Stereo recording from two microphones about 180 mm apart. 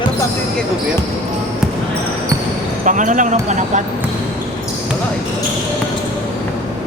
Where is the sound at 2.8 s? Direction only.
45° right (ahead or behind).